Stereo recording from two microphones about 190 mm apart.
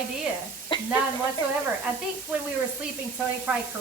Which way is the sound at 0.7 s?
25° left (ahead or behind).